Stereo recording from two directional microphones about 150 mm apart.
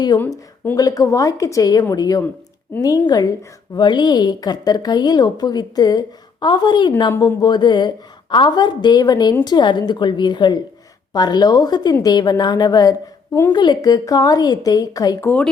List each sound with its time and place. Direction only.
0.8 s a woman's voice: 25° left (ahead or behind)
7.1 s a woman's voice: 15° left (ahead or behind)
7.4 s a woman's voice: 30° left (ahead or behind)
13.5 s a woman's voice: 30° left (ahead or behind)